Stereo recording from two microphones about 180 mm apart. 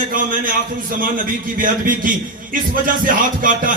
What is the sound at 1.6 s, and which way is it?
A man's voice, 50° right (ahead or behind).